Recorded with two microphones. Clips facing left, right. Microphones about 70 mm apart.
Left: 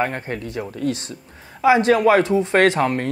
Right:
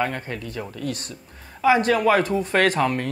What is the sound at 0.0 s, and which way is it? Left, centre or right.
Speech, left.